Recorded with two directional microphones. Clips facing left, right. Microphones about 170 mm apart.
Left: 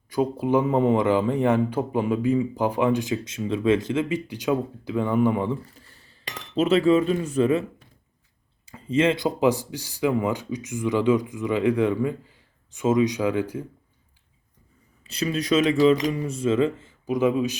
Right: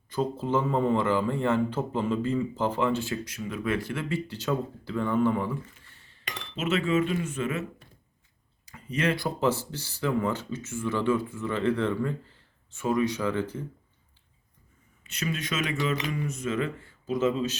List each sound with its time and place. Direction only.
0.1 s a man's voice: 15° left (ahead or behind)
5.6 s speech: 35° left (ahead or behind)
8.6 s a man's voice: 25° left (ahead or behind); by 13.7 s 10° left (ahead or behind)
15.0 s speech: 35° left (ahead or behind)
17.1 s a man's voice: 15° left (ahead or behind)